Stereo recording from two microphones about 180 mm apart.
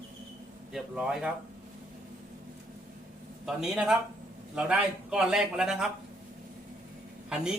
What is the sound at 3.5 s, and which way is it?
A man's voice, 5° right (ahead or behind).